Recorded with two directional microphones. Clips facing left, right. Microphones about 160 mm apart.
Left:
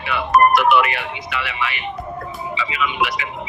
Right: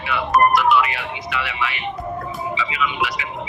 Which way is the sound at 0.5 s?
65° left (ahead or behind).